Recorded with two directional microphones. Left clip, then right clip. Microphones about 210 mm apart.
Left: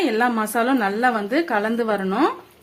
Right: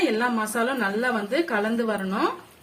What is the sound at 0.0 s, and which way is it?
A woman's voice, 50° left (ahead or behind).